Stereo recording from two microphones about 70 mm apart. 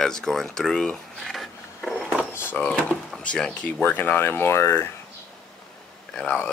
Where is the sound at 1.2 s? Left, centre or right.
Centre.